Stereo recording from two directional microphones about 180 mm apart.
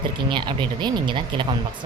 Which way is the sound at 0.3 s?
25° right (ahead or behind).